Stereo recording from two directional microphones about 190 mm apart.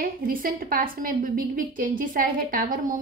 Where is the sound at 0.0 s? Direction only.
50° right (ahead or behind).